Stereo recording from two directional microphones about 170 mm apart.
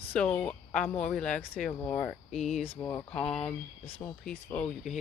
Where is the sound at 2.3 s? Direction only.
40° left (ahead or behind).